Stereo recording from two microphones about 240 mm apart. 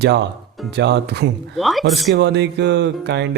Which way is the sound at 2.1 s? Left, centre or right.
Right.